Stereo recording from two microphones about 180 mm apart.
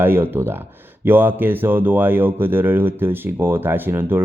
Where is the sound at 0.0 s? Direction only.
10° right (ahead or behind).